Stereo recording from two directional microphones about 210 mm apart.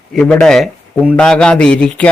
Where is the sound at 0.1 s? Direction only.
5° left (ahead or behind).